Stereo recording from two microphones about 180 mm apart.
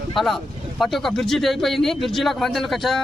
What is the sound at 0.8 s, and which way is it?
Speech, centre (ahead or behind).